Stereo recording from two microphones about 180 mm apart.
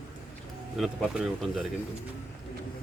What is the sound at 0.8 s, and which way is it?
Speech, centre (ahead or behind).